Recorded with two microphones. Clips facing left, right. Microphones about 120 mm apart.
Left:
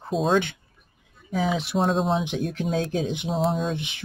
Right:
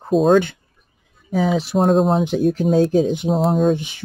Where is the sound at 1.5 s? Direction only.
45° right (ahead or behind).